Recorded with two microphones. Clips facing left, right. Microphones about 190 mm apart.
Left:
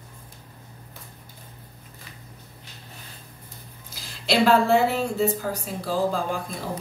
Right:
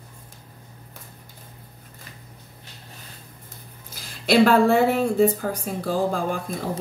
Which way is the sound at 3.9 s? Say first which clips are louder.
Right 5 dB; 55° right (ahead or behind).